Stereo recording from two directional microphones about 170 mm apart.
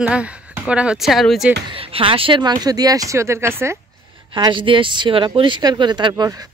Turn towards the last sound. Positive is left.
turn(degrees=-20)  # may be behind; listen again after turning